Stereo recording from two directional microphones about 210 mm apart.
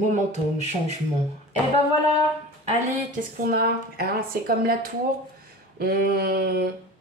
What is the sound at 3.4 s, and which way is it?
A woman's voice, 45° right (ahead or behind).